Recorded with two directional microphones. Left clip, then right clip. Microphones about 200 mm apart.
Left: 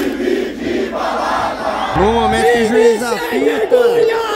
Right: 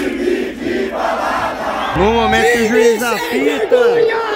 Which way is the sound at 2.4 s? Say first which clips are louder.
Even; 20° right (ahead or behind).